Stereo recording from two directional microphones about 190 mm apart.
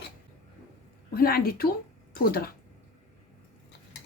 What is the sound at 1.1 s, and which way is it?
A woman's voice, 50° left (ahead or behind).